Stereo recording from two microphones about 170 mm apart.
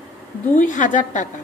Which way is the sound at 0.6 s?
50° left (ahead or behind).